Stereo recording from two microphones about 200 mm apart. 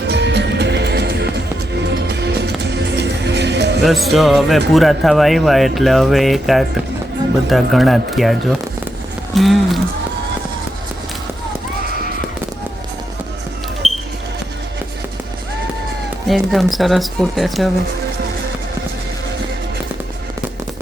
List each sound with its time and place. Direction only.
0.1 s music: 60° right (ahead or behind)
3.8 s speech: centre (ahead or behind)
13.8 s a sound: centre (ahead or behind)
16.3 s speech: centre (ahead or behind)